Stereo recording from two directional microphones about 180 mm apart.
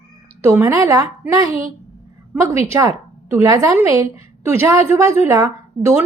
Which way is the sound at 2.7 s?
15° right (ahead or behind).